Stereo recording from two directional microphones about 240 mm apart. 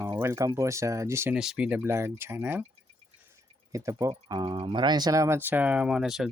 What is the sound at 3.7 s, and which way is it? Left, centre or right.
Speech, centre.